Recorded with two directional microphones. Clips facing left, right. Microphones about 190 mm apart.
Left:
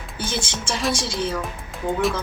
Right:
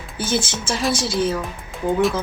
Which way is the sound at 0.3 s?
Centre (ahead or behind).